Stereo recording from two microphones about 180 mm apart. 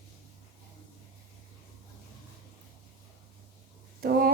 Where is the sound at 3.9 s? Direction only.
55° right (ahead or behind).